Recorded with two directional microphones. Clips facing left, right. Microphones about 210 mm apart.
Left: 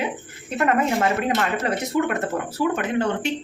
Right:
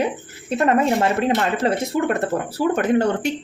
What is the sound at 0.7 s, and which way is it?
Speech, 30° right (ahead or behind).